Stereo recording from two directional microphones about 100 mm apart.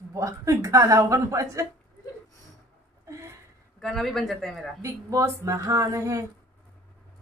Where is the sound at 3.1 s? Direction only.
30° right (ahead or behind).